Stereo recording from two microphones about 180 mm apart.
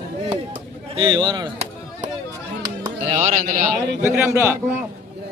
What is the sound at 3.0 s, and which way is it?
A man's voice, 40° right (ahead or behind).